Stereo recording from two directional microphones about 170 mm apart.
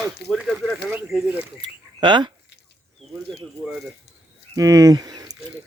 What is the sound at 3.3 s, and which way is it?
Speech, centre (ahead or behind).